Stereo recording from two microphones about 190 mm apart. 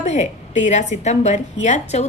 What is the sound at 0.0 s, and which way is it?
Speech, 35° left (ahead or behind).